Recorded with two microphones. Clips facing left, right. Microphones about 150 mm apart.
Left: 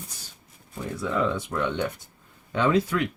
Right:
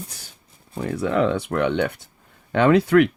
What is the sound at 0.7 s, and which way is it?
Speech, 65° right (ahead or behind).